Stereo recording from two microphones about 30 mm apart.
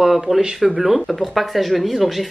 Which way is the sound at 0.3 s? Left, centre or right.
Right.